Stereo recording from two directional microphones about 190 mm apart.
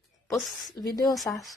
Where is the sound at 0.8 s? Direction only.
20° left (ahead or behind).